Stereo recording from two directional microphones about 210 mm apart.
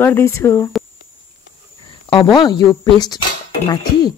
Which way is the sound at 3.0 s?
20° left (ahead or behind).